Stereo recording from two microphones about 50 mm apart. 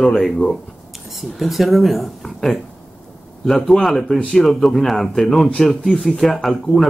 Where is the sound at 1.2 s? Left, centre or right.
Centre.